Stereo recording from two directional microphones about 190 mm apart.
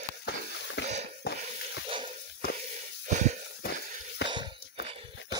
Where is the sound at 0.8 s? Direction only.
65° left (ahead or behind).